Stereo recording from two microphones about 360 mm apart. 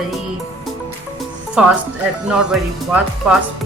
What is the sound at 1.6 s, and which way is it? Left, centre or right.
Speech, centre.